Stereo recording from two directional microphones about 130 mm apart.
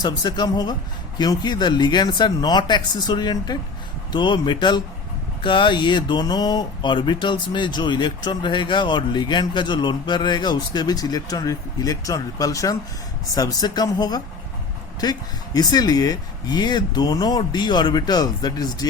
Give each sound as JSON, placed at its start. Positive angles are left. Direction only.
{"t": 0.0, "sound": "speech", "side_deg": 30}
{"t": 15.5, "sound": "speech", "side_deg": 30}